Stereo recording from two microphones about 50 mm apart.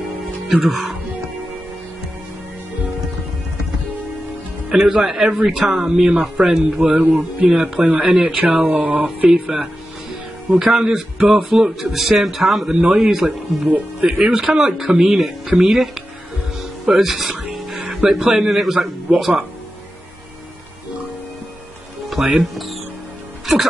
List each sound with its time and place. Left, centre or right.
0.5 s a man's voice: centre
4.6 s a man's voice: centre
6.4 s a man's voice: centre
6.8 s a man's voice: right
8.6 s speech: right
9.3 s a man's voice: centre
16.5 s music: centre
18.1 s a man's voice: centre
22.4 s speech: centre
23.4 s music: centre